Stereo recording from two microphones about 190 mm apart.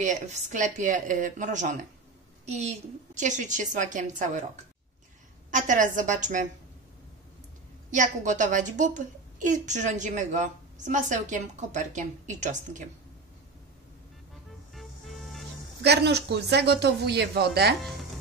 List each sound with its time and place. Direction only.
0.0 s a woman's voice: 40° right (ahead or behind)
5.5 s a woman's voice: 40° right (ahead or behind)
7.9 s a woman's voice: 40° right (ahead or behind)
14.7 s music: centre (ahead or behind)
15.8 s speech: 60° right (ahead or behind)